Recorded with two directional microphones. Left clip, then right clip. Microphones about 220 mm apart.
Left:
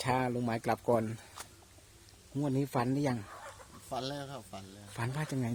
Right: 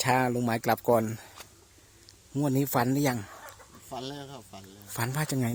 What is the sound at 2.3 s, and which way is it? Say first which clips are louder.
Speech: right 6 dB; 35° right (ahead or behind).